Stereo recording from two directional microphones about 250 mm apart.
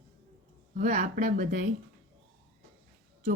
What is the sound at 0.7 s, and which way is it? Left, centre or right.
Speech, right.